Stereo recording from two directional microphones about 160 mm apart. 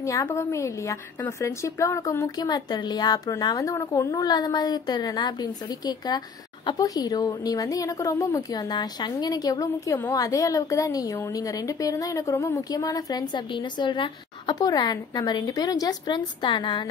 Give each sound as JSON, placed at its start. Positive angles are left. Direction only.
{"t": 0.0, "sound": "a woman's voice", "side_deg": 20}